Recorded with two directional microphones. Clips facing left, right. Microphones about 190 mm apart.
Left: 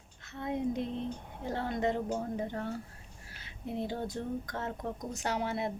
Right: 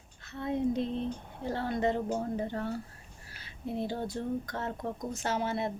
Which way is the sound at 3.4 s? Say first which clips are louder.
Right 2 dB; 20° left (ahead or behind).